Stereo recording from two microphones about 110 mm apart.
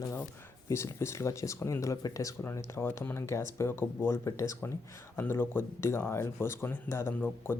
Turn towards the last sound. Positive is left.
turn(degrees=20)  # may be behind; listen again after turning